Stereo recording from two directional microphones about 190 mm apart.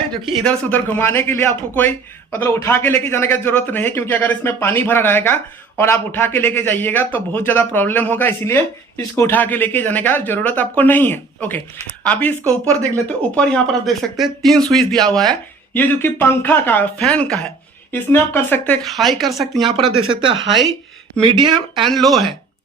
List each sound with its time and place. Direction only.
0.3 s a man's voice: 5° left (ahead or behind)
19.6 s speech: 25° right (ahead or behind)
21.3 s speech: 25° right (ahead or behind)
21.8 s speech: centre (ahead or behind)